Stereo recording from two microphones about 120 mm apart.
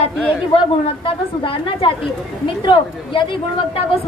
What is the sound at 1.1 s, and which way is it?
Speech, 45° left (ahead or behind).